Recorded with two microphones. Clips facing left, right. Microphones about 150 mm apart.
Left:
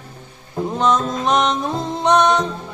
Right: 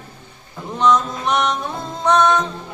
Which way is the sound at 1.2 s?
25° left (ahead or behind).